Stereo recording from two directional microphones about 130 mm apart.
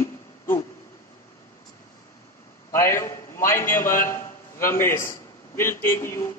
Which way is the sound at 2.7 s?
20° left (ahead or behind).